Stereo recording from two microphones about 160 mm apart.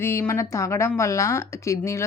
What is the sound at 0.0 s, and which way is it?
Speech, 15° left (ahead or behind).